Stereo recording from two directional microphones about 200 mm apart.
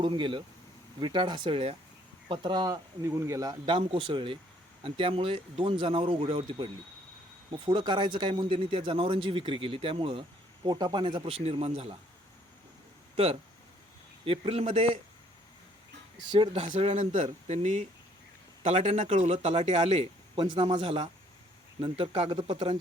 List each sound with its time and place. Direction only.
0.0 s a man's voice: 25° right (ahead or behind)
14.3 s a man's voice: 30° right (ahead or behind)
16.3 s a man's voice: 30° right (ahead or behind)